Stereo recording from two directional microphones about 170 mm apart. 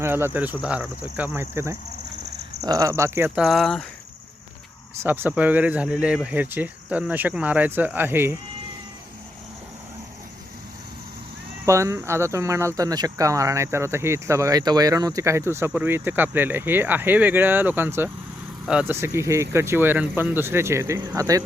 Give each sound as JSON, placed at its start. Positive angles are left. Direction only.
{"t": 0.0, "sound": "speech", "side_deg": -15}
{"t": 5.0, "sound": "speech", "side_deg": -10}
{"t": 11.6, "sound": "speech", "side_deg": -15}